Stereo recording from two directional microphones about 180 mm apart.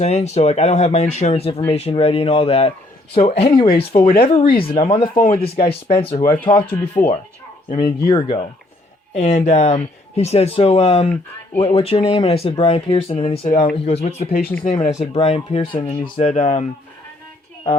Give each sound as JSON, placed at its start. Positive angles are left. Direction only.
{"t": 0.0, "sound": "speech", "side_deg": 40}
{"t": 5.1, "sound": "a man's voice", "side_deg": 50}
{"t": 5.4, "sound": "speech", "side_deg": 30}
{"t": 6.2, "sound": "speech", "side_deg": 10}
{"t": 7.7, "sound": "speech", "side_deg": 30}
{"t": 9.1, "sound": "speech", "side_deg": 40}